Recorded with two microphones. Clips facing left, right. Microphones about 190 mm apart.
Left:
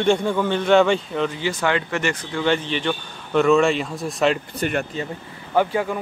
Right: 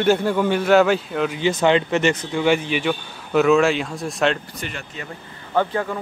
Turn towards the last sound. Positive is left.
turn(degrees=10)  # may be behind; listen again after turning